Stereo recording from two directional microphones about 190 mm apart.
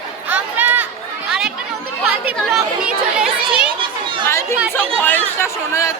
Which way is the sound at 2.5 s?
5° right (ahead or behind).